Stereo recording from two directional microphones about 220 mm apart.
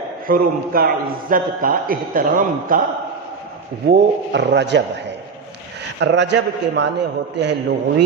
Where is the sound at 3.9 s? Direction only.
50° right (ahead or behind).